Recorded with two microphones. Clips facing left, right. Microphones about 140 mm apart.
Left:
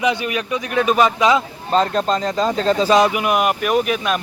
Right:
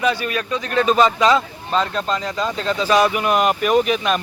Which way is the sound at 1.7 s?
40° left (ahead or behind).